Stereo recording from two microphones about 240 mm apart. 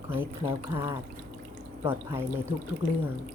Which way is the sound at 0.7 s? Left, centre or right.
Right.